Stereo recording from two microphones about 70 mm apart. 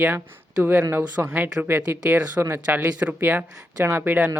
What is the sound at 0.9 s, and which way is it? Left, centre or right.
Speech, right.